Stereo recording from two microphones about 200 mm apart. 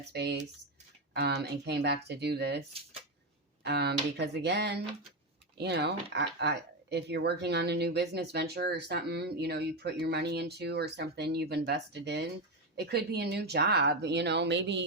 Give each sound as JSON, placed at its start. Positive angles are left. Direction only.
{"t": 0.1, "sound": "speech", "side_deg": -55}